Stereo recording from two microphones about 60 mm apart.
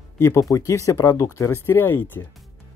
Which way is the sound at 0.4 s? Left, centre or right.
Left.